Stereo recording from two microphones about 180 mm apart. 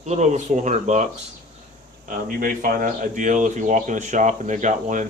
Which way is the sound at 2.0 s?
50° right (ahead or behind).